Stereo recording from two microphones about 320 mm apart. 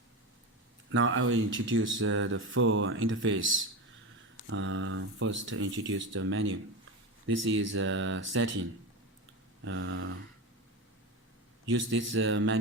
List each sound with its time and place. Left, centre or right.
0.9 s speech: right
9.6 s speech: right
11.6 s speech: right